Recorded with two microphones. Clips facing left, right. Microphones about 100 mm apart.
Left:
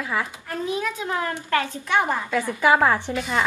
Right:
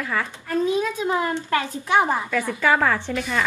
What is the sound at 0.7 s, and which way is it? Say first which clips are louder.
A woman's voice: right 4 dB; 20° right (ahead or behind).